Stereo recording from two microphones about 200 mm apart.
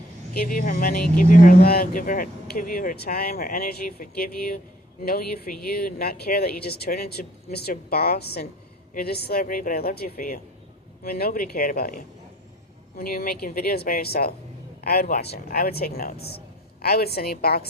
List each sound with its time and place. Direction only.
0.3 s a man's voice: 45° left (ahead or behind)